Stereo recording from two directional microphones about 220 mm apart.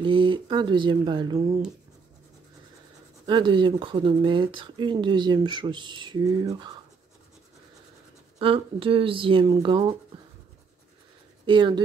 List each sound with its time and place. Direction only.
0.0 s speech: 20° right (ahead or behind)
3.3 s speech: 20° right (ahead or behind)
8.4 s speech: 25° right (ahead or behind)
11.4 s speech: 20° right (ahead or behind)